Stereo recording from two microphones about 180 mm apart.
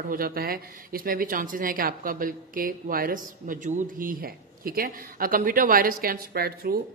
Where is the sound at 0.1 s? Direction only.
55° right (ahead or behind).